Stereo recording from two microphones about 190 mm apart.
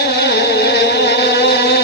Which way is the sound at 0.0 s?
60° left (ahead or behind).